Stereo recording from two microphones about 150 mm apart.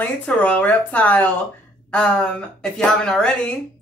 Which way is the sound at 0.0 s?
10° left (ahead or behind).